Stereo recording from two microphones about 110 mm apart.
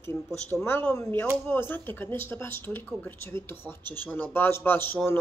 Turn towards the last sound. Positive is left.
turn(degrees=20)  # may be behind; listen again after turning